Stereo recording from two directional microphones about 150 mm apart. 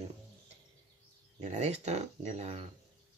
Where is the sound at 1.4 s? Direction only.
45° right (ahead or behind).